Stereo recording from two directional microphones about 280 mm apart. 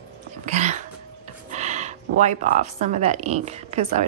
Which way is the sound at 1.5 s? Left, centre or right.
Right.